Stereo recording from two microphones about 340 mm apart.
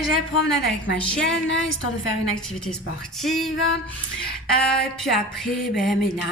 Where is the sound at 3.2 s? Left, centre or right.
Centre.